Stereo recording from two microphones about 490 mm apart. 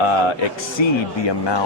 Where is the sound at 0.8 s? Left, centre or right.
Left.